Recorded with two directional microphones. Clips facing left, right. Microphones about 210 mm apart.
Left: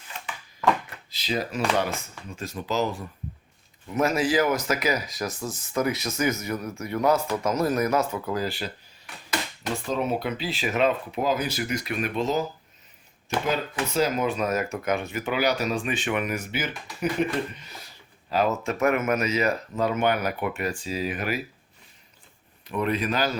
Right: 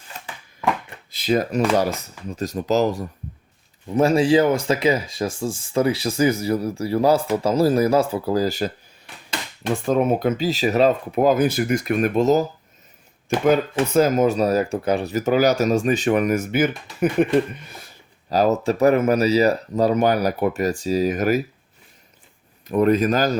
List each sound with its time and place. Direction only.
1.1 s speech: 50° right (ahead or behind)
3.8 s speech: 30° right (ahead or behind)
9.8 s speech: 50° right (ahead or behind)
13.9 s speech: 45° right (ahead or behind)
18.3 s speech: 40° right (ahead or behind)
22.6 s speech: 45° right (ahead or behind)